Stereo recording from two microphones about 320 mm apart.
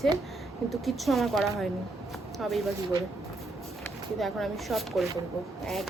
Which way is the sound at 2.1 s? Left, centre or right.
Centre.